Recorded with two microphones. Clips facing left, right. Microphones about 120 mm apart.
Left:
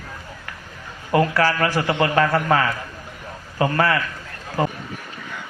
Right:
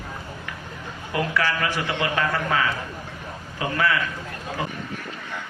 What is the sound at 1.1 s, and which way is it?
A man's voice, 40° left (ahead or behind).